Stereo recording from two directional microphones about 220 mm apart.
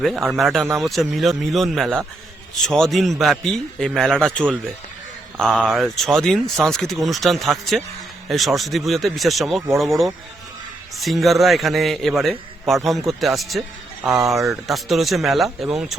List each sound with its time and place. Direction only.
0.0 s a man's voice: centre (ahead or behind)